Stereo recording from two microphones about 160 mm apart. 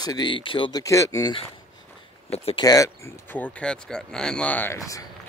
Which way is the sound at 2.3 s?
40° left (ahead or behind).